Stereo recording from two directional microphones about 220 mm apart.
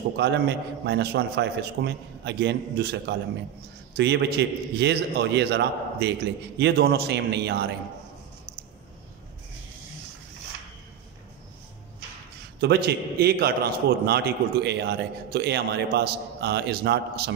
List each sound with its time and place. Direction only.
0.2 s a man's voice: 50° right (ahead or behind)
12.5 s a man's voice: 45° right (ahead or behind)